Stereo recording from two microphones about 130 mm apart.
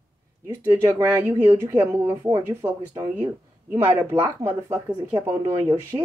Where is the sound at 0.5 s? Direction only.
25° right (ahead or behind).